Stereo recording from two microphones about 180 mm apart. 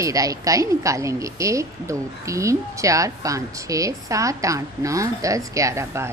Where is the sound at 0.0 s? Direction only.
20° right (ahead or behind).